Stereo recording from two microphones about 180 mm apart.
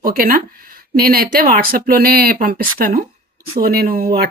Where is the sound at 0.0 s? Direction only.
55° right (ahead or behind).